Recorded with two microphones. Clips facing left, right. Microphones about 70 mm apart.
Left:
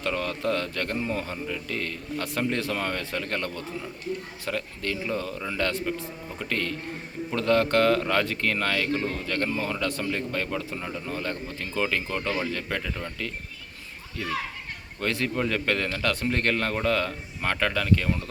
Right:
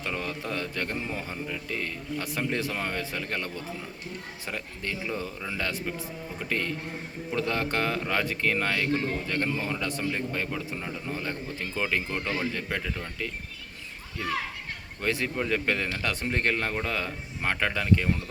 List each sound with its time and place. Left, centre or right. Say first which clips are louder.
0.0 s a man's voice: left 5 dB; centre
11.1 s a man's voice: left 1 dB; centre
15.0 s a man's voice: left 2 dB; centre